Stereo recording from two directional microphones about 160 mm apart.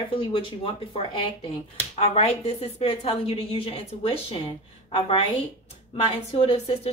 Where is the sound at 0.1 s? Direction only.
35° left (ahead or behind).